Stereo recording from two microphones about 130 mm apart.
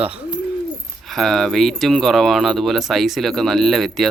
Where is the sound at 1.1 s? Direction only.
Centre (ahead or behind).